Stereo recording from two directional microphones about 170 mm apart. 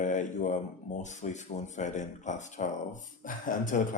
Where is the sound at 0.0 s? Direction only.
45° left (ahead or behind).